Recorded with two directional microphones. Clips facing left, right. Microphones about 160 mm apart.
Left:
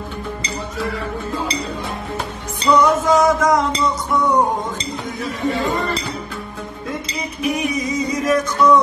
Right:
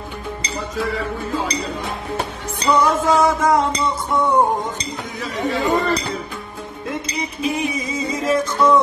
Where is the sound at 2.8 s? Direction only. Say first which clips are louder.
Left 1 dB; 30° right (ahead or behind).